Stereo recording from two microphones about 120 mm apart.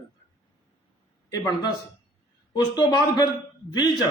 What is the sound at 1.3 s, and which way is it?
Speech, 35° left (ahead or behind).